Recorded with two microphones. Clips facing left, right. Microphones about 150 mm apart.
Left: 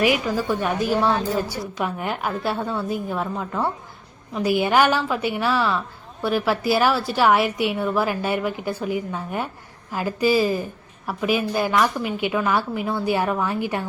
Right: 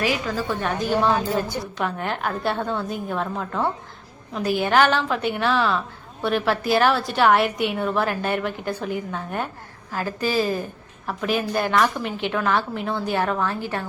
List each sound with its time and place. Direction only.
0.0 s a woman's voice: 15° left (ahead or behind)
0.9 s a woman's voice: centre (ahead or behind)